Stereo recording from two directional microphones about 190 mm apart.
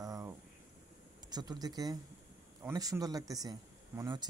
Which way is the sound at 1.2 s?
20° right (ahead or behind).